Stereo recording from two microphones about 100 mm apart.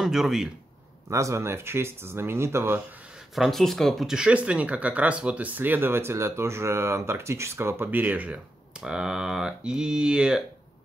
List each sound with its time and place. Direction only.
0.0 s speech: 5° right (ahead or behind)
1.1 s speech: 30° right (ahead or behind)
3.3 s speech: centre (ahead or behind)